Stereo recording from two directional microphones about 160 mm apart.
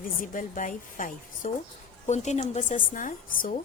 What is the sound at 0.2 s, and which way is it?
Speech, 55° left (ahead or behind).